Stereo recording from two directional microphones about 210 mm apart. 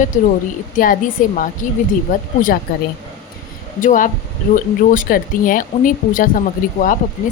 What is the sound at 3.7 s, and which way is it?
Speech, 40° left (ahead or behind).